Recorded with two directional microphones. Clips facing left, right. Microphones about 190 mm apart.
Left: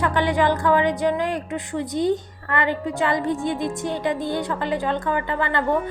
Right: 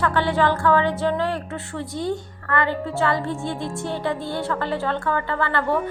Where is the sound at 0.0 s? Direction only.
15° left (ahead or behind).